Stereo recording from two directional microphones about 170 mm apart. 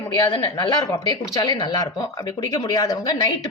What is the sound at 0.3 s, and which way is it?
Speech, 20° left (ahead or behind).